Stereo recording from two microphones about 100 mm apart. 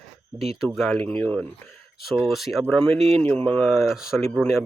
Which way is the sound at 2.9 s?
90° right.